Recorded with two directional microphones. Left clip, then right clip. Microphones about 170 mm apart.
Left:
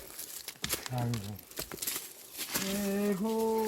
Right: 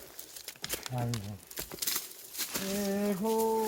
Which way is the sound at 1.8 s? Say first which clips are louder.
Right 3 dB; 20° right (ahead or behind).